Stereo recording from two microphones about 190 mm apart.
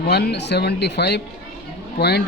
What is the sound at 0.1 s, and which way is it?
Speech, 60° left (ahead or behind).